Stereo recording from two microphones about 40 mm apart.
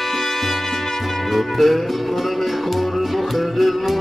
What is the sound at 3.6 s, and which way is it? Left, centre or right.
Music, centre.